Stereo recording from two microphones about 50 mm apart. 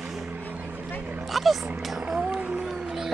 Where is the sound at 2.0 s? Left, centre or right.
Centre.